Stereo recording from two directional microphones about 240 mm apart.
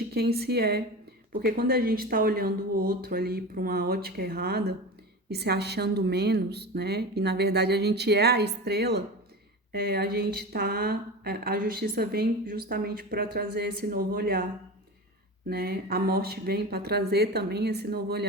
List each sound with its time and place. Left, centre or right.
0.1 s speech: right
15.4 s speech: right